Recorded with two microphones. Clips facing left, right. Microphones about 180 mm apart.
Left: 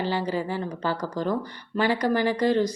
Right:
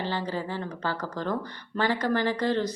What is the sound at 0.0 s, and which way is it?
A woman's voice, 15° left (ahead or behind).